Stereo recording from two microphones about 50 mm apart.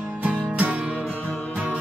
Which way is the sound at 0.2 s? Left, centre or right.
Right.